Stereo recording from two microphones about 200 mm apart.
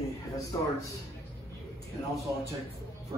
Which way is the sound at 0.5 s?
20° left (ahead or behind).